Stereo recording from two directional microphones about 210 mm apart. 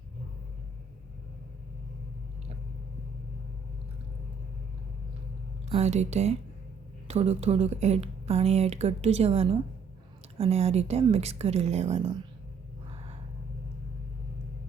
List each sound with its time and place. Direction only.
5.6 s speech: 30° right (ahead or behind)